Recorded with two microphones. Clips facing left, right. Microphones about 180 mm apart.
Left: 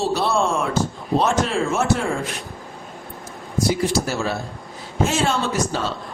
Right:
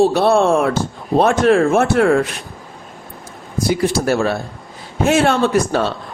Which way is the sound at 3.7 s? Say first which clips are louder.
Right 8 dB; 60° right (ahead or behind).